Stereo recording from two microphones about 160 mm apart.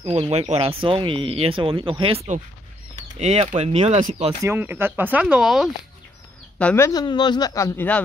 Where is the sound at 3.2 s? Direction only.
40° right (ahead or behind).